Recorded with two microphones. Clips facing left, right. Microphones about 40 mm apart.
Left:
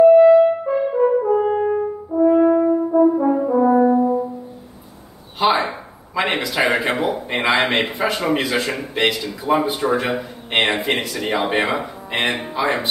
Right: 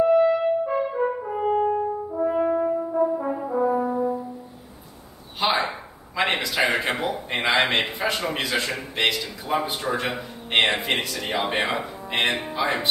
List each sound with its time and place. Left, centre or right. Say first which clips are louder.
0.1 s french horn: left 9 dB; centre
3.5 s french horn: left 7 dB; left
5.4 s a sound: left 5 dB; centre
7.4 s a man's voice: left 3 dB; centre